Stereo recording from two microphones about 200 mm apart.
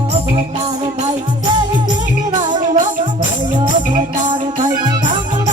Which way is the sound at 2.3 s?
40° right (ahead or behind).